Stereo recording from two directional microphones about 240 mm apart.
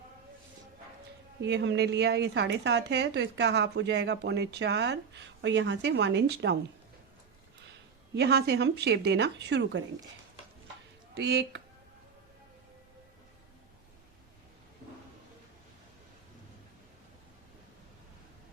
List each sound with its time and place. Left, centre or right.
1.4 s a woman's voice: right
8.1 s a woman's voice: right
11.1 s a woman's voice: right